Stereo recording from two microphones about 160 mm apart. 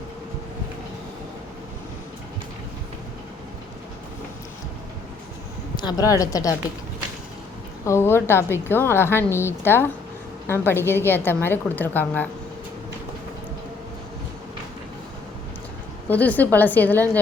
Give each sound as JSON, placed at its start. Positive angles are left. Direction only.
{"t": 5.7, "sound": "a woman's voice", "side_deg": 25}
{"t": 7.9, "sound": "a woman's voice", "side_deg": 15}
{"t": 16.0, "sound": "a woman's voice", "side_deg": 10}